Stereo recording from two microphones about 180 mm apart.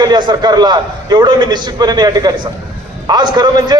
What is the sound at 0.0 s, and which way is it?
A man's voice, 25° right (ahead or behind).